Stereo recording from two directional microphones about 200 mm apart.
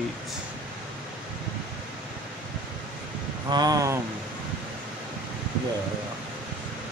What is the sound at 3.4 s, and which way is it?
Speech, 20° right (ahead or behind).